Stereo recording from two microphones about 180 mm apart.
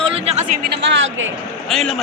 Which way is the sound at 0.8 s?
90° right.